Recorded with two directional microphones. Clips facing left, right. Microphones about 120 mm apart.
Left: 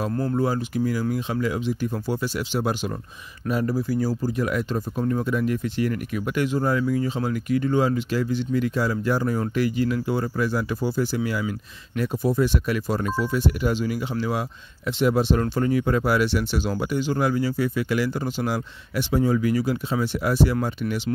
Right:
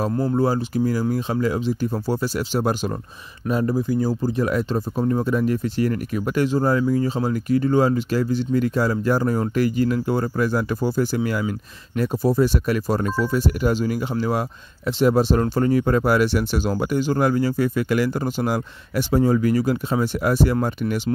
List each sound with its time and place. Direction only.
0.1 s speech: 25° right (ahead or behind); by 2.9 s 40° right (ahead or behind)
3.4 s speech: 25° right (ahead or behind); by 21.0 s 45° right (ahead or behind)